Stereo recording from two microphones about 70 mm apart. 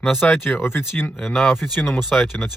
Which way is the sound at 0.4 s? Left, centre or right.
Left.